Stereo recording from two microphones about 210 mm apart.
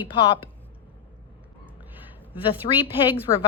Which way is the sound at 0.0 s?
25° left (ahead or behind).